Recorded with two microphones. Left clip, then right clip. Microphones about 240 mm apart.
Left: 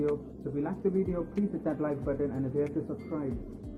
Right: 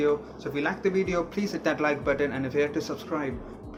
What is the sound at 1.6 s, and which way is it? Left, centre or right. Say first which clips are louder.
Speech: right 9 dB; right.